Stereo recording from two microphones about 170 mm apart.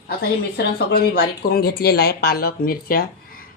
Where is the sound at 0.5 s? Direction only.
65° left (ahead or behind).